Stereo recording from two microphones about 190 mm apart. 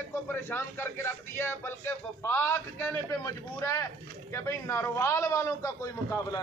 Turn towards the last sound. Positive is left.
turn(degrees=15)  # may be behind; listen again after turning